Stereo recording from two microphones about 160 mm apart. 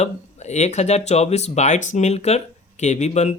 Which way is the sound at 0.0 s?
45° left (ahead or behind).